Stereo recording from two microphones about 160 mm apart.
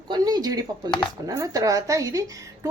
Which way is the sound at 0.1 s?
25° right (ahead or behind).